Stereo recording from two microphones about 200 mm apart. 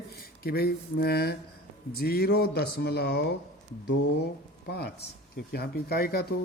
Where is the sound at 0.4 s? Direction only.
50° left (ahead or behind).